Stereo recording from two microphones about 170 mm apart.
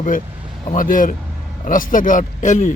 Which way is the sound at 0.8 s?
55° left (ahead or behind).